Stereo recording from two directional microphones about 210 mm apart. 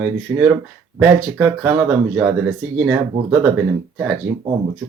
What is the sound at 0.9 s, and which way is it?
Speech, 5° right (ahead or behind).